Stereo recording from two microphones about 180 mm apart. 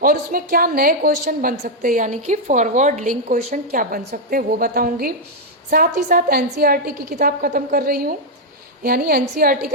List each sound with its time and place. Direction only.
0.0 s a woman's voice: 50° right (ahead or behind)